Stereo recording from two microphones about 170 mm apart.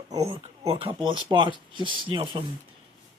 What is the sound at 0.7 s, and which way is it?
A man's voice, 30° right (ahead or behind).